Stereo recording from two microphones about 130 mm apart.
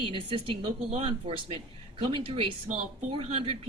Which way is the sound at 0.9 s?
55° right (ahead or behind).